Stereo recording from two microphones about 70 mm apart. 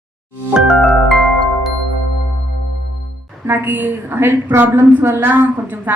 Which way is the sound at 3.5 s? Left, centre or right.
Right.